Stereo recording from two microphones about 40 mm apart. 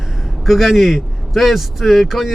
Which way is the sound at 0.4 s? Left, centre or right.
Centre.